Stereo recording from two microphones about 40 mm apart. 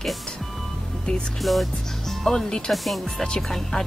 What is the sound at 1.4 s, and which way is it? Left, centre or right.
Speech, centre.